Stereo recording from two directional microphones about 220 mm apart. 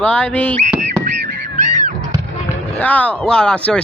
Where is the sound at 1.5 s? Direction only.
35° right (ahead or behind).